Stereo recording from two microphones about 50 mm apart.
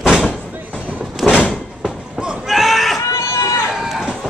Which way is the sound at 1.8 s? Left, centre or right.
Centre.